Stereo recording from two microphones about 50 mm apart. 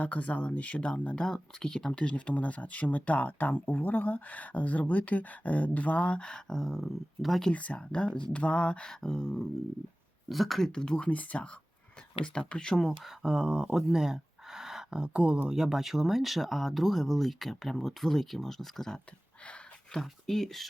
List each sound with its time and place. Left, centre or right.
0.0 s speech: left; by 1.9 s centre
1.9 s speech: left; by 7.4 s centre
7.5 s speech: left
10.2 s speech: centre
10.7 s speech: centre
11.1 s speech: left; by 12.9 s centre
13.0 s speech: centre
15.4 s speech: centre